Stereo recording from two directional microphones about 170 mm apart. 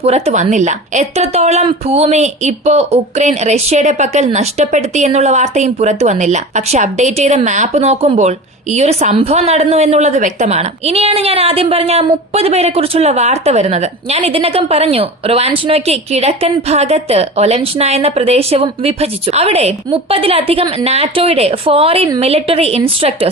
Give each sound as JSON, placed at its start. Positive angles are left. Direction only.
{"t": 0.0, "sound": "a woman's voice", "side_deg": -40}